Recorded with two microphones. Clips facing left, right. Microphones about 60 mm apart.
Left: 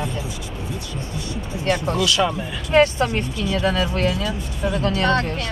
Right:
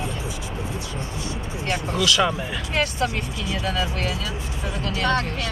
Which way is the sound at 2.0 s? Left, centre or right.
Centre.